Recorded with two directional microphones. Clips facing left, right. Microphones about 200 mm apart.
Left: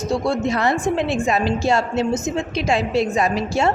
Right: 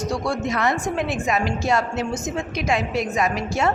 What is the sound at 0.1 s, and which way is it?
A woman's voice, 25° left (ahead or behind).